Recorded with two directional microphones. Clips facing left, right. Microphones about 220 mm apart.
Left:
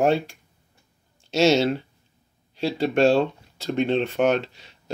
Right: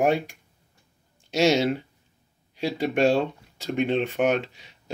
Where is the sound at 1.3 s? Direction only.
15° right (ahead or behind).